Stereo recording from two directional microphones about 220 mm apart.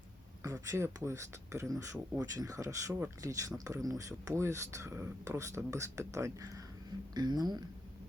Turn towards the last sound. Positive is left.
turn(degrees=-20)  # may be behind; listen again after turning